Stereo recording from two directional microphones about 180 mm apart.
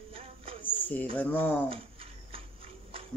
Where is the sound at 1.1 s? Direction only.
10° left (ahead or behind).